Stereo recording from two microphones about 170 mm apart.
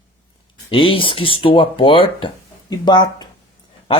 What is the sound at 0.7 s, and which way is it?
Speech, 30° left (ahead or behind).